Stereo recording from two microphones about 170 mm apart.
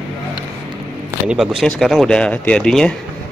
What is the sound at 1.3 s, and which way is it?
Speech, 5° right (ahead or behind).